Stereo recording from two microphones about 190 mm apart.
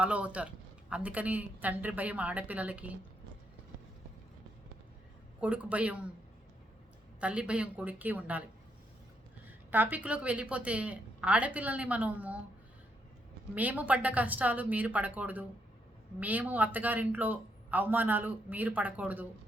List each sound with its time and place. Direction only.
0.0 s a man's voice: 5° right (ahead or behind)
5.4 s a man's voice: 5° right (ahead or behind)
7.2 s a man's voice: 5° right (ahead or behind)
9.7 s a man's voice: 10° right (ahead or behind)
13.6 s a man's voice: 10° right (ahead or behind)